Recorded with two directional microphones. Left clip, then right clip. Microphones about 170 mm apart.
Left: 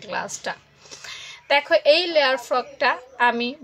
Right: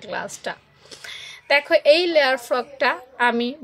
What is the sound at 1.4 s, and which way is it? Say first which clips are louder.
A woman's voice: right 1 dB; 25° right (ahead or behind).